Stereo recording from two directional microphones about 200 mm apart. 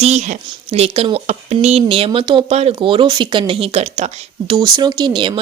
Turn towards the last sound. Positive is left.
turn(degrees=-25)  # may be behind; listen again after turning